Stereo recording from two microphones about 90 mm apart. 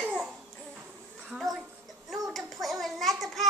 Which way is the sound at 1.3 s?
Centre (ahead or behind).